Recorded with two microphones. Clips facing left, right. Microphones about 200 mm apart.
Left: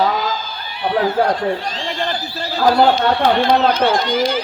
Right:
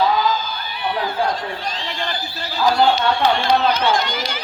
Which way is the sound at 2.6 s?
60° left (ahead or behind).